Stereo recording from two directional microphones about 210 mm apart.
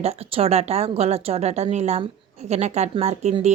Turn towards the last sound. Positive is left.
turn(degrees=-30)  # may be behind; listen again after turning